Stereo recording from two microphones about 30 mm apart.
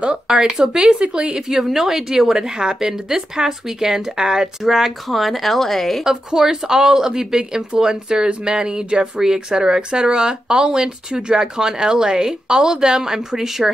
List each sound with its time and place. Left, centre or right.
0.0 s speech: right
1.5 s speech: centre
4.6 s speech: centre
6.0 s speech: centre